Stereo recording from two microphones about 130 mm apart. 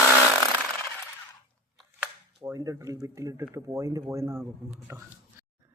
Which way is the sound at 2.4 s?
25° right (ahead or behind).